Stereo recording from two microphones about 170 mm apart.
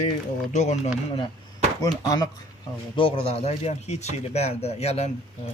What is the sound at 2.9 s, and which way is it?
Speech, 35° left (ahead or behind).